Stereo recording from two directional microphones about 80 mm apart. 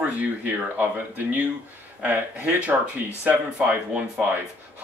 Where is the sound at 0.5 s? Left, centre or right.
Right.